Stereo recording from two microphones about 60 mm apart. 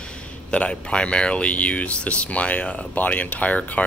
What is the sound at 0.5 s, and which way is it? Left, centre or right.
Speech, centre.